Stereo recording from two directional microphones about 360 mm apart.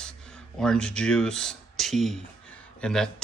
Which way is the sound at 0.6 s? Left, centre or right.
Centre.